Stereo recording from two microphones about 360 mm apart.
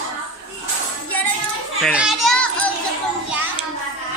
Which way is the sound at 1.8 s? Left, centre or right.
Centre.